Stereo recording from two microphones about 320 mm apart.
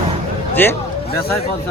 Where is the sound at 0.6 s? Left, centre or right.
Centre.